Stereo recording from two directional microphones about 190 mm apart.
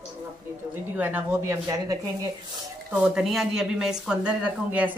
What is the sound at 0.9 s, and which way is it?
A woman's voice, 10° right (ahead or behind).